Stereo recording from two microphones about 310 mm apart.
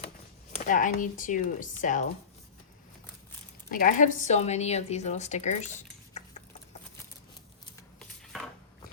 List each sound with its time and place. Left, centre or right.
0.5 s a woman's voice: left
3.7 s a woman's voice: left
7.9 s a sound: centre